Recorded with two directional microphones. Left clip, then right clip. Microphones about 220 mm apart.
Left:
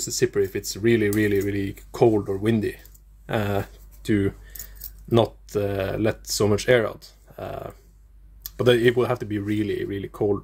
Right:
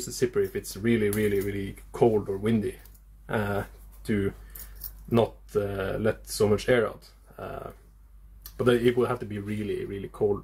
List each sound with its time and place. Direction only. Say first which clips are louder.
0.2 s speech: left 3 dB; 45° left (ahead or behind)